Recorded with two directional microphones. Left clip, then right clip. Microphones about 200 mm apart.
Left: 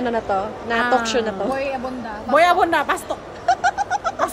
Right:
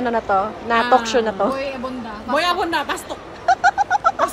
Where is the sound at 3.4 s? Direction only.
10° left (ahead or behind).